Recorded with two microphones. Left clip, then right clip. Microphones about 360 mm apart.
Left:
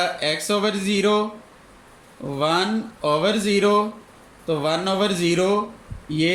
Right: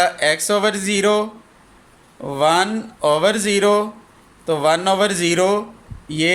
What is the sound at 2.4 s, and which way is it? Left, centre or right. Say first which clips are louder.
Speech: right 5 dB; centre.